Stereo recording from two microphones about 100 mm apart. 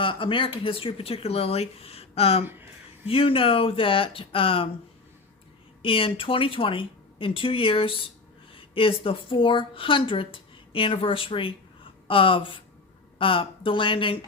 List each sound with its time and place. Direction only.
0.0 s speech: 60° left (ahead or behind); by 2.4 s 85° left
3.1 s speech: 65° left (ahead or behind)
5.8 s speech: 65° left (ahead or behind)